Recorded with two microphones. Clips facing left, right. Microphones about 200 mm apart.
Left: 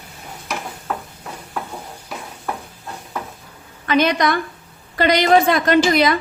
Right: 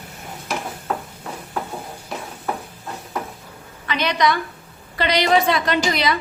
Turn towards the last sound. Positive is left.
turn(degrees=50)  # may be behind; listen again after turning